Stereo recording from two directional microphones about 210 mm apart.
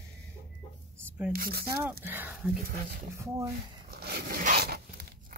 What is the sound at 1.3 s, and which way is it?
Speech, 45° right (ahead or behind).